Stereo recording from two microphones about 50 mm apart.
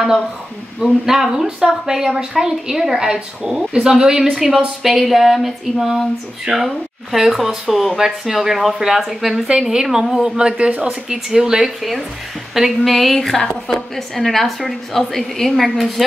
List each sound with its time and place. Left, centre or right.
0.7 s a woman's voice: centre
10.3 s a woman's voice: centre